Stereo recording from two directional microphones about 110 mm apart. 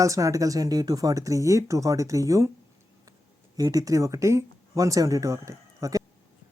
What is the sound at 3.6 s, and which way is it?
Speech, 35° right (ahead or behind).